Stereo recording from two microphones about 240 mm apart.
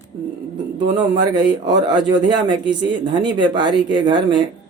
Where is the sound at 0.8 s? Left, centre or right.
Centre.